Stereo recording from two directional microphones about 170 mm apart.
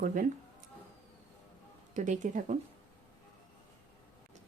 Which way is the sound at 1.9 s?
45° right (ahead or behind).